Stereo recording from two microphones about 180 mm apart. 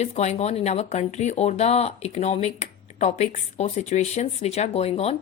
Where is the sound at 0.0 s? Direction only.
40° left (ahead or behind).